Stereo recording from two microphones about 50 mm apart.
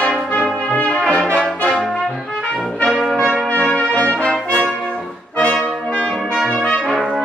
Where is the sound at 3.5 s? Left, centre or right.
Left.